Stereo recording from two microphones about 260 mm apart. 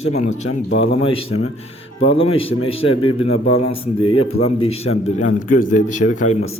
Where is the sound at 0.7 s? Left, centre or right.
Left.